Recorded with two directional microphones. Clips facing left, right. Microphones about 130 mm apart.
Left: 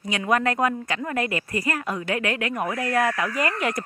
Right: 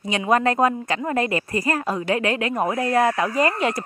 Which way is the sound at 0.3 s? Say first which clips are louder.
Right 3 dB; 30° right (ahead or behind).